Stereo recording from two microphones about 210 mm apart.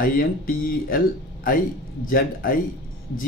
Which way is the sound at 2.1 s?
45° left (ahead or behind).